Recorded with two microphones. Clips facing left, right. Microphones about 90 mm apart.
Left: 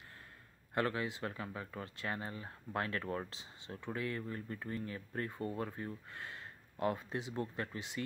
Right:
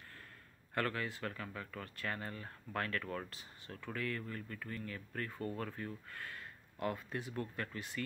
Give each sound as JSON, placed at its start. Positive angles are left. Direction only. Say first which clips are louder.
{"t": 0.7, "sound": "speech", "louder": "left 2 dB", "side_deg": 20}